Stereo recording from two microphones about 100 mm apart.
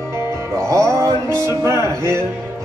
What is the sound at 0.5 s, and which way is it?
Music, 30° right (ahead or behind).